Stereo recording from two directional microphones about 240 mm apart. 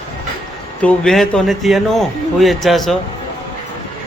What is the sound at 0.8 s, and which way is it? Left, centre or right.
Speech, centre.